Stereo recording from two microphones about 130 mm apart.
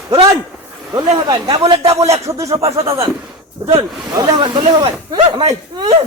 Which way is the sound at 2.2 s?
25° right (ahead or behind).